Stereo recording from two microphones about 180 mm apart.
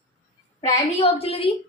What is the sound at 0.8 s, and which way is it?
Speech, 35° left (ahead or behind).